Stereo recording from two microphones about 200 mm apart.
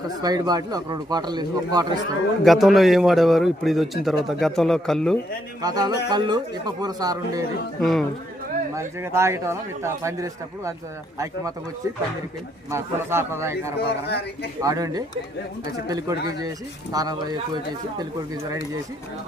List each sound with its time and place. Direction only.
0.2 s speech: 20° right (ahead or behind)
2.4 s speech: centre (ahead or behind)
5.6 s speech: 20° right (ahead or behind)
7.8 s speech: centre (ahead or behind)
8.7 s speech: 15° right (ahead or behind)
12.7 s speech: 10° right (ahead or behind)
14.1 s speech: 55° left (ahead or behind)
14.6 s speech: 15° right (ahead or behind)